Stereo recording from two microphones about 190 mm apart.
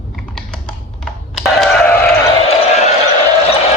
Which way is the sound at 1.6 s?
5° left (ahead or behind).